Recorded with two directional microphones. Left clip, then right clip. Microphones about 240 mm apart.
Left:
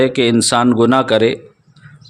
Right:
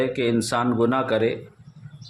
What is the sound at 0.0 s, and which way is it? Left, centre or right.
Speech, left.